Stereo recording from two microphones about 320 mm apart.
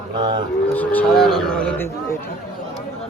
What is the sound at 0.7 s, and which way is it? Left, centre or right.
Speech, centre.